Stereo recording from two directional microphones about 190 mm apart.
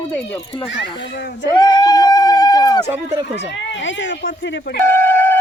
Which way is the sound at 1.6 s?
20° left (ahead or behind).